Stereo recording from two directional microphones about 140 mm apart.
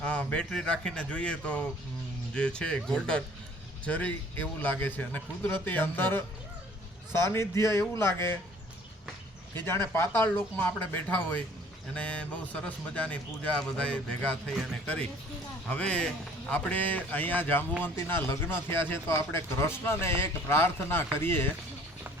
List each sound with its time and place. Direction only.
0.0 s a man's voice: 5° left (ahead or behind)
9.6 s speech: 15° left (ahead or behind)